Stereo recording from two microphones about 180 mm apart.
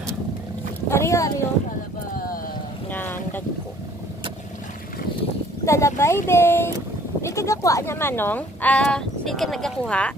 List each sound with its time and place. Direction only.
0.8 s speech: 15° left (ahead or behind)
2.1 s clip-clop: 50° left (ahead or behind)
2.9 s boat: 10° left (ahead or behind)
5.7 s speech: 15° left (ahead or behind)